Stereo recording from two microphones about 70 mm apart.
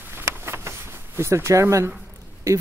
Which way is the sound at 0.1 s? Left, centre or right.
Right.